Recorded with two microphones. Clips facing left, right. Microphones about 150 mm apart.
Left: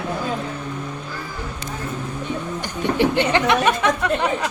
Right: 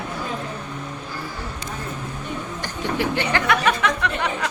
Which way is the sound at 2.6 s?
20° left (ahead or behind).